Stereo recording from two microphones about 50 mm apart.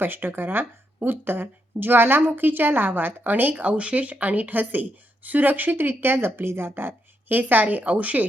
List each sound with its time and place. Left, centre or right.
0.0 s a woman's voice: right
3.5 s speech: right